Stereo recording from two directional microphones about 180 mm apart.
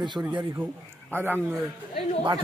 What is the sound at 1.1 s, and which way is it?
Speech, 10° right (ahead or behind).